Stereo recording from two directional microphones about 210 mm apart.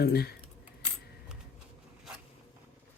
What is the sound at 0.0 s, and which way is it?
Speech, 45° left (ahead or behind).